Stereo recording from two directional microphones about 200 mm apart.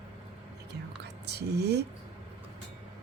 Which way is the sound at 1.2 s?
55° right (ahead or behind).